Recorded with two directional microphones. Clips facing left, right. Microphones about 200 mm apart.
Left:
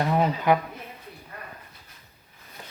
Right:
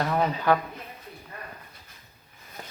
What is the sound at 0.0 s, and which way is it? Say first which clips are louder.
Speech: left 2 dB; 20° left (ahead or behind).